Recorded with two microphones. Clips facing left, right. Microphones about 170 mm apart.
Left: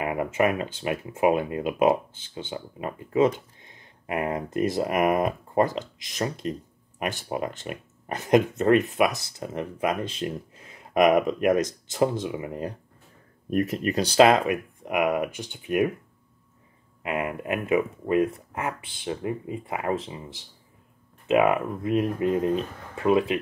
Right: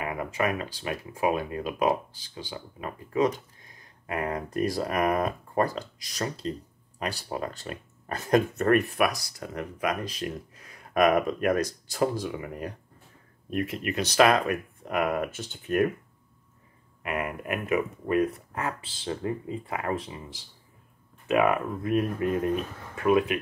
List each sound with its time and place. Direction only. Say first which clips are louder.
0.0 s a sound: left 5 dB; 25° left (ahead or behind)
0.4 s speech: left 4 dB; 25° left (ahead or behind)
6.4 s speech: left 2 dB; 30° right (ahead or behind)
7.0 s speech: left 3 dB; 20° left (ahead or behind)
13.5 s speech: left 5 dB; 40° left (ahead or behind); by 15.9 s 10° left (ahead or behind)
17.0 s speech: left 3 dB; 20° left (ahead or behind)